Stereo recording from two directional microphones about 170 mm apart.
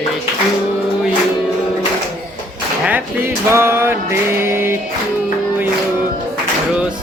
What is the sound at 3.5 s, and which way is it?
Music, 15° right (ahead or behind).